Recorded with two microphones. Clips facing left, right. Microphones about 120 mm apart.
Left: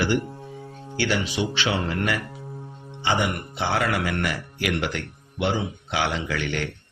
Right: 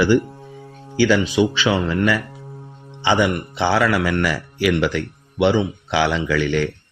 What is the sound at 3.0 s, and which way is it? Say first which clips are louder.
Speech: right 6 dB; 90° right.